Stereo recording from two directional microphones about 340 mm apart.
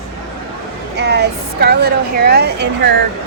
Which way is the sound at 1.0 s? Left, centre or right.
Right.